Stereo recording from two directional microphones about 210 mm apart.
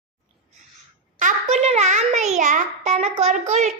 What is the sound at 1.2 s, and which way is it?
A child's voice, 35° right (ahead or behind).